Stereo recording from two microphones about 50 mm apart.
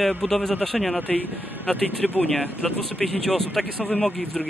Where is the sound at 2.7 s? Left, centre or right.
Centre.